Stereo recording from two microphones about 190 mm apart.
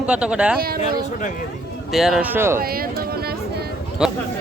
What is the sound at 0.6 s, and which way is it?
Speech, 50° right (ahead or behind).